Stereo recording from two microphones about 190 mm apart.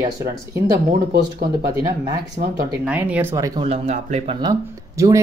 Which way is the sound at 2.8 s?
10° right (ahead or behind).